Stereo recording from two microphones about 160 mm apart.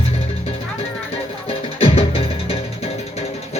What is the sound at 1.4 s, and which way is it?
Music, 35° left (ahead or behind).